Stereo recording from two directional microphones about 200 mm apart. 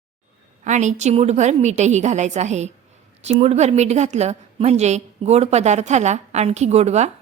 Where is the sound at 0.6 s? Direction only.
35° right (ahead or behind).